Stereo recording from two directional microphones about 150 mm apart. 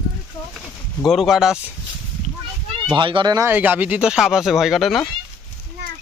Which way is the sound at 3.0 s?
30° right (ahead or behind).